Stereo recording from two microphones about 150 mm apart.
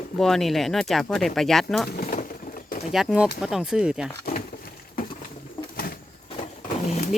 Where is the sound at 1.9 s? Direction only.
70° left (ahead or behind).